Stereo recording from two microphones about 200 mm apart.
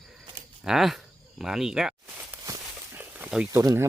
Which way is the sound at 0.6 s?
Centre (ahead or behind).